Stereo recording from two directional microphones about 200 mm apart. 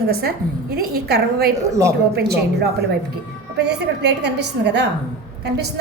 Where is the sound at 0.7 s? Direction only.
50° right (ahead or behind).